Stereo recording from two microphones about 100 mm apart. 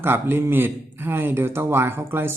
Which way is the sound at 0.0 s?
20° right (ahead or behind).